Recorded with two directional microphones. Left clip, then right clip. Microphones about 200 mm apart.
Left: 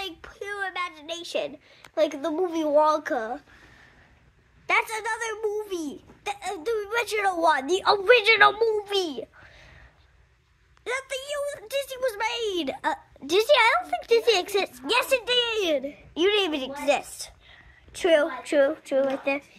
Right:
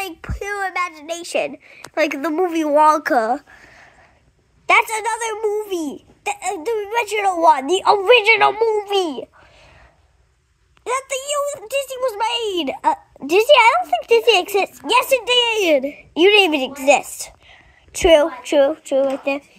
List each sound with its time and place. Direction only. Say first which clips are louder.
0.0 s a child's voice: right 8 dB; 25° right (ahead or behind)
4.6 s a woman's voice: right 9 dB; 20° right (ahead or behind)
10.8 s speech: right 8 dB; 15° right (ahead or behind)